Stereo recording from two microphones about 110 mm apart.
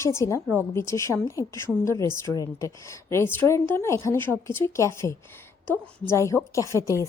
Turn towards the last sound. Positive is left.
turn(degrees=25)  # may be behind; listen again after turning